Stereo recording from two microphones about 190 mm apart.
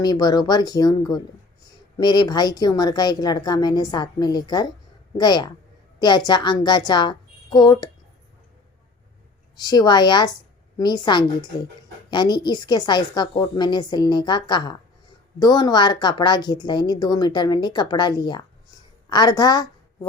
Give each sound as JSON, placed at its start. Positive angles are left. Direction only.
{"t": 0.0, "sound": "a woman's voice", "side_deg": 20}
{"t": 9.6, "sound": "a woman's voice", "side_deg": 20}